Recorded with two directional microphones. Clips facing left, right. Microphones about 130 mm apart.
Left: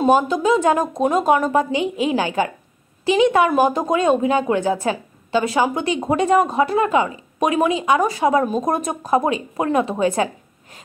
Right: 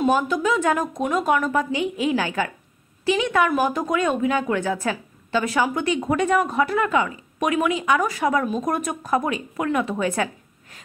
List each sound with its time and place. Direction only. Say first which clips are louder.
0.0 s speech: left 4 dB; 25° left (ahead or behind)